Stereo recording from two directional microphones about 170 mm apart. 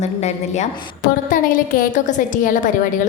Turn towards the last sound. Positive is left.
turn(degrees=50)  # may be behind; listen again after turning